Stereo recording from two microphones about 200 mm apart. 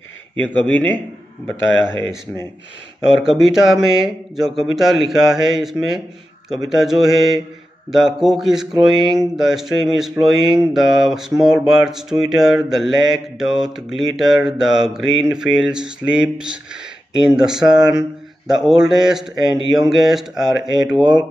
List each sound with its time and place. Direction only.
0.4 s a man's voice: 5° left (ahead or behind)
3.3 s speech: centre (ahead or behind)